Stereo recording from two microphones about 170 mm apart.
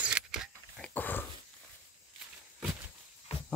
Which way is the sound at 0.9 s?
10° left (ahead or behind).